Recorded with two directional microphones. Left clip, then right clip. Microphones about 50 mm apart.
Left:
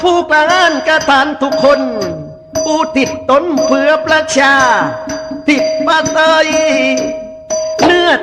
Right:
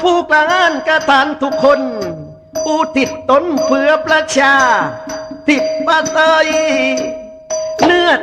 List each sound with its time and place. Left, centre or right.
0.0 s speech: left
0.3 s chime: left
0.5 s a sound: left
0.9 s chime: left
1.5 s speech: left
1.8 s speech: centre
2.6 s chime: left
5.5 s chime: centre; by 7.1 s left
7.5 s music: left